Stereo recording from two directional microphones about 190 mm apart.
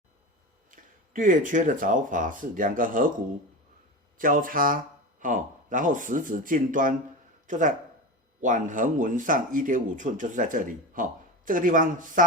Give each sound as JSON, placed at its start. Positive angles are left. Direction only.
{"t": 1.1, "sound": "speech", "side_deg": -45}
{"t": 4.2, "sound": "speech", "side_deg": -45}